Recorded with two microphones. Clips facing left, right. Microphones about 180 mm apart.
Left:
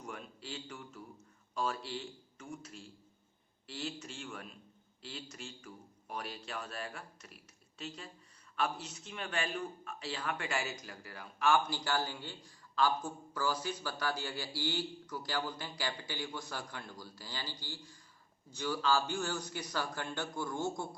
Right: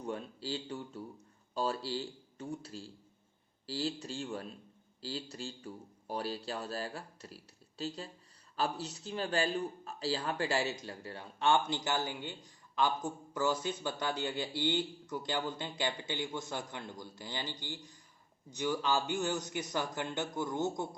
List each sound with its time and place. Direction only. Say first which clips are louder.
0.0 s speech: right 7 dB; 30° right (ahead or behind)